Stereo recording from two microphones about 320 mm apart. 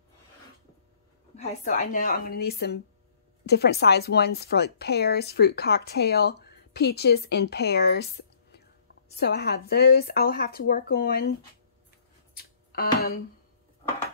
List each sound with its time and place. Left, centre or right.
1.3 s speech: left
12.4 s music: left